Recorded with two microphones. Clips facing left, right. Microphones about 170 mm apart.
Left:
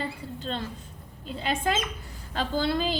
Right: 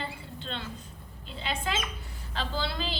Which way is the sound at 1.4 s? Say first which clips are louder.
Left 5 dB; 45° left (ahead or behind).